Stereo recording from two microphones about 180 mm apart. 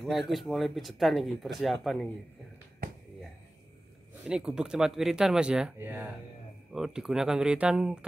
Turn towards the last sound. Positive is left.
turn(degrees=-5)  # may be behind; listen again after turning